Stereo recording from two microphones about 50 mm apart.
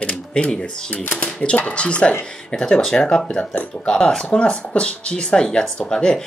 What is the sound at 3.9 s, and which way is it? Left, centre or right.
Speech, centre.